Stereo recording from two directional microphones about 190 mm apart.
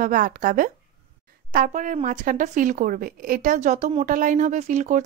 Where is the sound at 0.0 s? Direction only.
45° right (ahead or behind).